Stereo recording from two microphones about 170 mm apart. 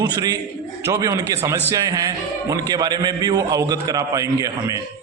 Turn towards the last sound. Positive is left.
turn(degrees=-20)  # may be behind; listen again after turning